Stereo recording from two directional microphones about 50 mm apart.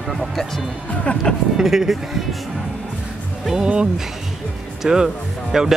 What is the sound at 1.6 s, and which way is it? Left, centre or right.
Speech, centre.